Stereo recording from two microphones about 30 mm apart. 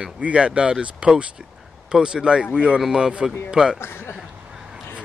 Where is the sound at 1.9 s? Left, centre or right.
Right.